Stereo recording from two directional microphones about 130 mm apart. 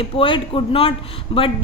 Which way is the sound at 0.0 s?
40° left (ahead or behind).